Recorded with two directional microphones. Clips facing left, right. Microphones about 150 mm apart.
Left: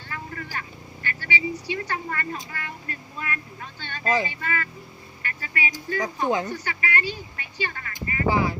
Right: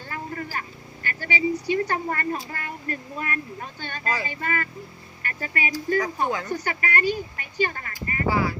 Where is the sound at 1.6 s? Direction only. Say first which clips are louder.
Right 5 dB; 40° right (ahead or behind).